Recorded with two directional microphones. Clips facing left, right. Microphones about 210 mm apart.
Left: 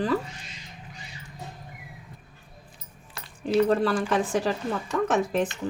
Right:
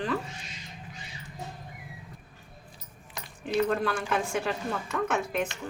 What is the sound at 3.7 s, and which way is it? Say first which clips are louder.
Speech: left 5 dB; 35° left (ahead or behind).